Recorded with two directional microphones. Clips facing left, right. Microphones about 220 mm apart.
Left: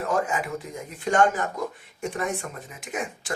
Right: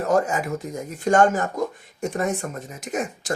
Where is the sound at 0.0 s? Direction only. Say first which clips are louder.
Right 5 dB; 40° right (ahead or behind).